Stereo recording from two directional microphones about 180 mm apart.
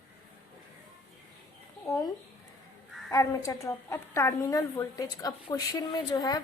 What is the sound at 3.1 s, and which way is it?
A woman's voice, 15° left (ahead or behind).